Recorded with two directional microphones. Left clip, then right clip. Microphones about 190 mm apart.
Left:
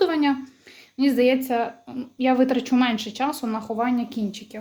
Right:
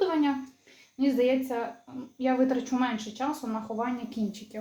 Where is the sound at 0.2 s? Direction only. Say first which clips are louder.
Left 5 dB; 55° left (ahead or behind).